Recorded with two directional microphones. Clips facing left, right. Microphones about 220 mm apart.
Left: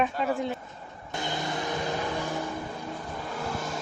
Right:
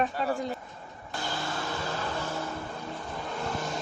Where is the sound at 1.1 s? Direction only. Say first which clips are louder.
Left 3 dB; 20° left (ahead or behind).